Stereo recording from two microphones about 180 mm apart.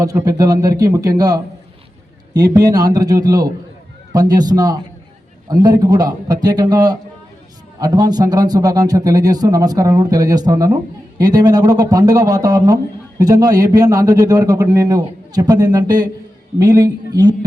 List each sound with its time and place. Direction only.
0.0 s a man's voice: 20° right (ahead or behind)